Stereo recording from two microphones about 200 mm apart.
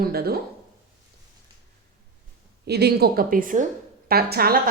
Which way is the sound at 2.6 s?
55° right (ahead or behind).